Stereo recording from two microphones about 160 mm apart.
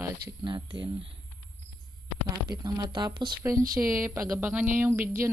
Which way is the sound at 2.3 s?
25° right (ahead or behind).